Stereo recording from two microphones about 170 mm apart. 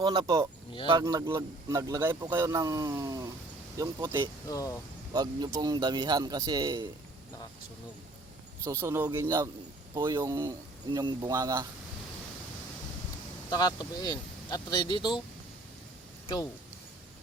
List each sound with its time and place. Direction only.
0.0 s speech: 25° right (ahead or behind)
4.4 s speech: 20° left (ahead or behind)
5.1 s speech: 25° right (ahead or behind)
8.6 s speech: 15° right (ahead or behind)
13.5 s speech: 25° left (ahead or behind)